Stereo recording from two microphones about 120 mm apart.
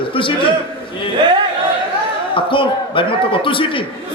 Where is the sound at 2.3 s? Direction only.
45° left (ahead or behind).